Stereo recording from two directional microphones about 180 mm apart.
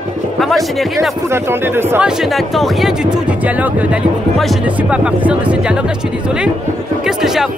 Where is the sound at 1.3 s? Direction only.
15° right (ahead or behind).